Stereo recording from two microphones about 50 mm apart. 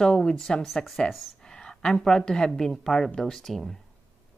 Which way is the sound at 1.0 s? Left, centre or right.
Centre.